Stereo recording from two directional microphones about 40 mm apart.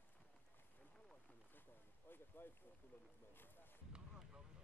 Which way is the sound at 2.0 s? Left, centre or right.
Left.